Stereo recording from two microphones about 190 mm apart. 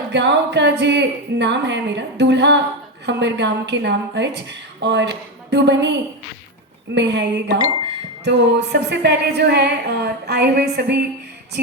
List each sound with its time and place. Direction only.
0.1 s a woman's voice: 65° right (ahead or behind)